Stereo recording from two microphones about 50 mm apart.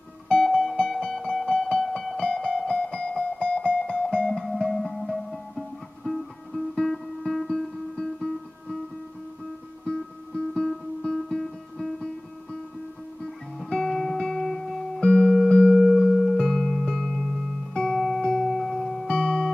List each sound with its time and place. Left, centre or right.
0.4 s music: centre
4.3 s music: centre
9.8 s music: centre
13.7 s music: centre
15.8 s music: centre
17.9 s music: centre
18.3 s singing bowl: centre
18.8 s music: centre
19.0 s music: centre